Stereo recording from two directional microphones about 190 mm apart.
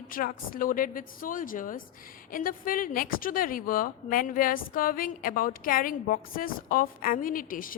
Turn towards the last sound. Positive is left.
turn(degrees=45)  # may be behind; listen again after turning